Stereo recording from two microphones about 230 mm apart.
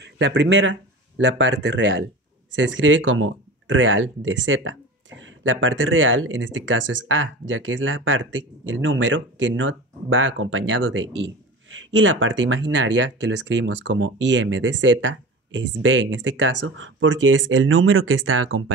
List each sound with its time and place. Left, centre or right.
0.0 s speech: right